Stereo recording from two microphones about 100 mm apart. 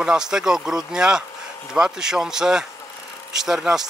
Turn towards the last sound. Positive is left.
turn(degrees=-5)  # may be behind; listen again after turning